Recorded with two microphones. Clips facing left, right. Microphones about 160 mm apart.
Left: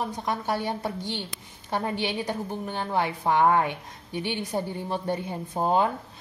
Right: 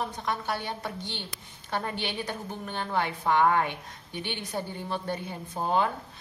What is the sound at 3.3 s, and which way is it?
Speech, 30° left (ahead or behind).